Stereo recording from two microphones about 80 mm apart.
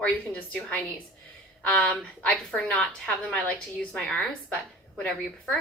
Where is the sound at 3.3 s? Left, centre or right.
Centre.